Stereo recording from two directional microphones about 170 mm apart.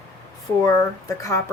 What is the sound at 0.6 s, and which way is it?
Speech, 20° left (ahead or behind).